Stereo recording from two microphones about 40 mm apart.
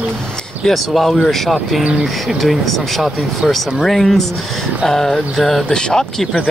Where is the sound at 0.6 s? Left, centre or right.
Centre.